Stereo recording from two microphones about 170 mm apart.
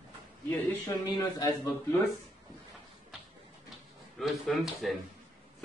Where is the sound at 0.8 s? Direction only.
20° left (ahead or behind).